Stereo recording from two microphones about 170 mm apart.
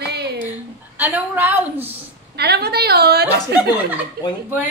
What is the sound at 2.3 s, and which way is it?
Speech, 70° right (ahead or behind).